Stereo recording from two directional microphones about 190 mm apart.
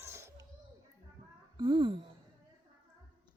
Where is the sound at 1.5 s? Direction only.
25° right (ahead or behind).